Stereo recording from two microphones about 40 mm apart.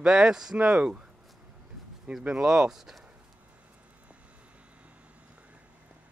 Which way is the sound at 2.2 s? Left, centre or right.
Centre.